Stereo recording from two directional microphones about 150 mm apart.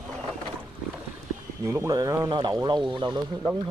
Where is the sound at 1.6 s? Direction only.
20° right (ahead or behind).